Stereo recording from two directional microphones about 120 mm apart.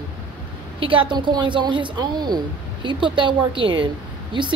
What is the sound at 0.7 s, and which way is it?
A woman's voice, 45° right (ahead or behind).